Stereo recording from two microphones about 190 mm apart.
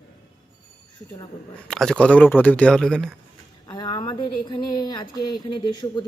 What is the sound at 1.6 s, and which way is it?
Speech, centre (ahead or behind).